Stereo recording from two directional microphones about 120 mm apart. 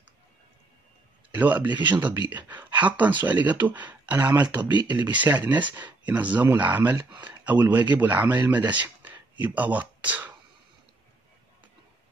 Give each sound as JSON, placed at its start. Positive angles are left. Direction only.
{"t": 1.3, "sound": "speech", "side_deg": -15}
{"t": 9.0, "sound": "whispering", "side_deg": -15}